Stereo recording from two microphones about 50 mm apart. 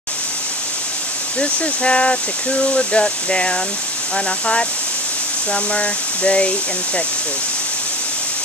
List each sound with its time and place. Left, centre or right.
1.4 s speech: left
5.5 s speech: left